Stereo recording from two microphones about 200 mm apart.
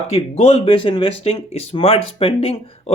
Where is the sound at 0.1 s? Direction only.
30° left (ahead or behind).